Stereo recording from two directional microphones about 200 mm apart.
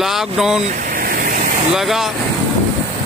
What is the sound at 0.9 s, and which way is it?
Vehicle, 45° right (ahead or behind).